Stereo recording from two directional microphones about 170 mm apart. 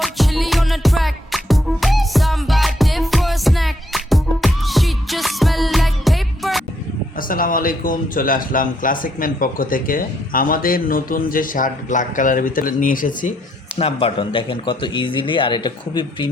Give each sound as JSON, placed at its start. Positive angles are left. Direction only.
{"t": 0.0, "sound": "music", "side_deg": 0}
{"t": 7.2, "sound": "a man's voice", "side_deg": 55}
{"t": 13.7, "sound": "speech", "side_deg": 35}